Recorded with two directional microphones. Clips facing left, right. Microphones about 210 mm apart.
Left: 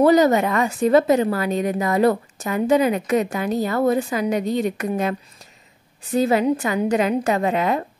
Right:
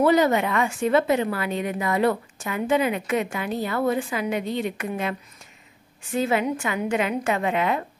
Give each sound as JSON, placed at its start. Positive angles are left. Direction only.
{"t": 0.0, "sound": "a woman's voice", "side_deg": 40}
{"t": 6.1, "sound": "a woman's voice", "side_deg": 40}